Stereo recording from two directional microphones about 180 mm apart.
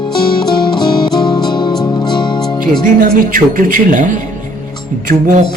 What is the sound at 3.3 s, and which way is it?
Speech, 50° right (ahead or behind).